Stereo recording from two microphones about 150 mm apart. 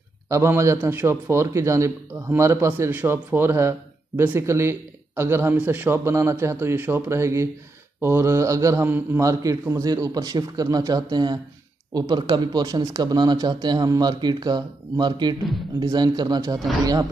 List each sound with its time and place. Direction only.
0.3 s a man's voice: 20° right (ahead or behind)